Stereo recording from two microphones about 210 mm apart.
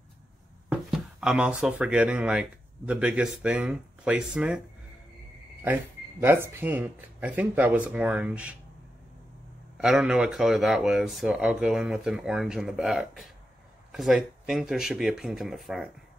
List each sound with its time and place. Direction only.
0.7 s speech: 5° right (ahead or behind)
6.2 s speech: 10° right (ahead or behind)
9.8 s speech: centre (ahead or behind)